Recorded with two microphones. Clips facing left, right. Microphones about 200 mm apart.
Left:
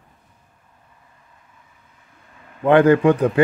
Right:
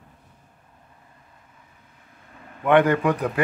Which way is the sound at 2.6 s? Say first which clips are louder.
Left 5 dB; 30° left (ahead or behind).